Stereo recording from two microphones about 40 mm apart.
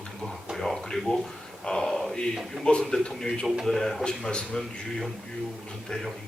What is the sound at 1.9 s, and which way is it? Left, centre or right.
Speech, centre.